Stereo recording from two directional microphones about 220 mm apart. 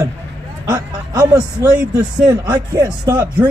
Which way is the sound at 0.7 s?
15° right (ahead or behind).